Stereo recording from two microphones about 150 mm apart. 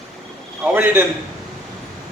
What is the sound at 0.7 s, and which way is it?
Speech, 15° right (ahead or behind).